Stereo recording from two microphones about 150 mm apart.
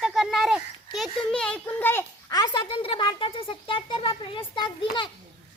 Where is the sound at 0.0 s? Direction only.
Centre (ahead or behind); by 2.0 s 15° left (ahead or behind).